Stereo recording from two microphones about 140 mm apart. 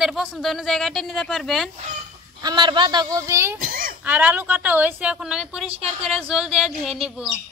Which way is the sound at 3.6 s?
85° right.